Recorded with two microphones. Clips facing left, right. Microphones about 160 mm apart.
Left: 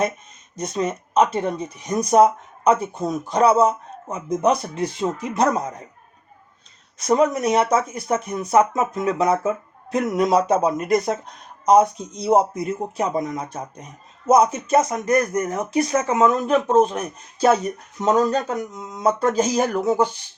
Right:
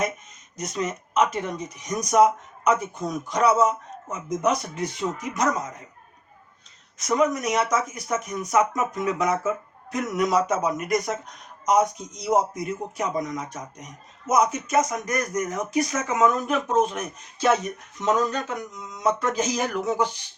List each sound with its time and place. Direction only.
0.5 s speech: 30° left (ahead or behind)
7.0 s speech: 30° left (ahead or behind)